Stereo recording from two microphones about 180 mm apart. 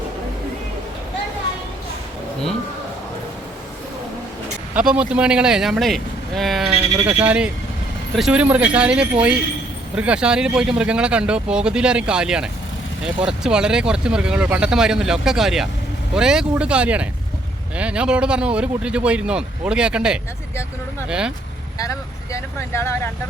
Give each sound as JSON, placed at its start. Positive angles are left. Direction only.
{"t": 4.7, "sound": "speech", "side_deg": -5}
{"t": 21.8, "sound": "speech", "side_deg": 15}